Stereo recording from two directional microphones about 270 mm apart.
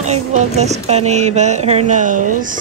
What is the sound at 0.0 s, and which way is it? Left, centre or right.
Speech, right.